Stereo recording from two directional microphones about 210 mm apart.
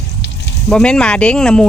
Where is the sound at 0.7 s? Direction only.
5° left (ahead or behind).